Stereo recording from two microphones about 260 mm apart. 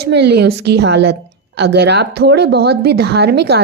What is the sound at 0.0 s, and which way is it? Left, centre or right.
Speech, right.